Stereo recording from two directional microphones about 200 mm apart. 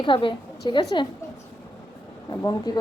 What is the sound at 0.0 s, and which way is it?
A woman's voice, 25° left (ahead or behind).